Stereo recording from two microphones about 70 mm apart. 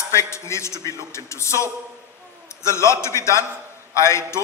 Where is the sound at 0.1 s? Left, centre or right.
Left.